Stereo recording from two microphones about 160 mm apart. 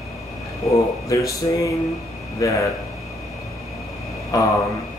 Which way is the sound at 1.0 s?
20° left (ahead or behind).